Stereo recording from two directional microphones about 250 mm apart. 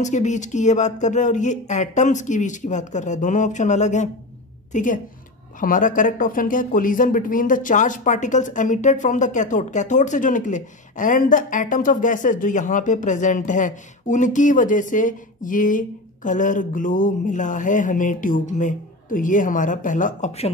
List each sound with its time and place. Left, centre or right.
0.0 s speech: left